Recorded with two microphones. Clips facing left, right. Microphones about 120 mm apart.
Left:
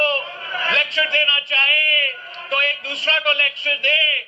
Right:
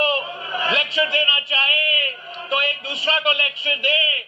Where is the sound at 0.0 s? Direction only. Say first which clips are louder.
Even; 15° right (ahead or behind).